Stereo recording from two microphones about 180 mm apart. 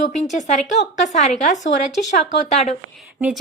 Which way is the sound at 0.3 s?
40° left (ahead or behind).